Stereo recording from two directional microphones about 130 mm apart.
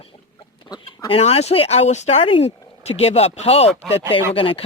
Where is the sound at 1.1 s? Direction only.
50° left (ahead or behind).